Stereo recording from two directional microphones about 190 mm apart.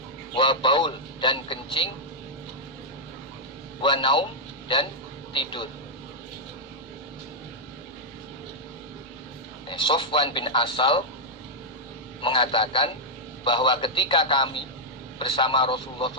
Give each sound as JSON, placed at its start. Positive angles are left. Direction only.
{"t": 0.3, "sound": "a man's voice", "side_deg": 25}
{"t": 3.8, "sound": "a man's voice", "side_deg": 25}
{"t": 5.3, "sound": "a man's voice", "side_deg": 25}
{"t": 9.6, "sound": "a man's voice", "side_deg": 25}
{"t": 12.2, "sound": "a man's voice", "side_deg": 25}